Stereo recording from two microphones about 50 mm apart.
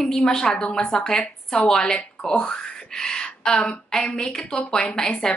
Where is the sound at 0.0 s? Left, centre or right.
Centre.